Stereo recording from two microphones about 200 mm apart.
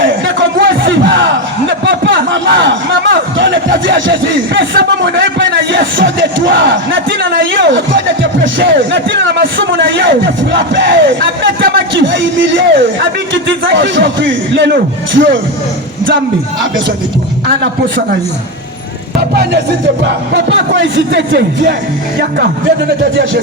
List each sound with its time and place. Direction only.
0.0 s music: 65° right (ahead or behind)
0.7 s battle cry: 65° right (ahead or behind)
1.8 s speech: 60° right (ahead or behind)
20.1 s speech: 60° right (ahead or behind)